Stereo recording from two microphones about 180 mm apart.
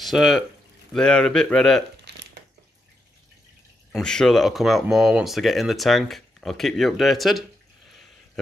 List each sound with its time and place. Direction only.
0.0 s speech: centre (ahead or behind)
2.1 s a sound: 70° right (ahead or behind)
3.9 s speech: 5° left (ahead or behind)